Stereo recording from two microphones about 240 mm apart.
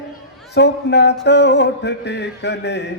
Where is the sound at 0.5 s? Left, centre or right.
Left.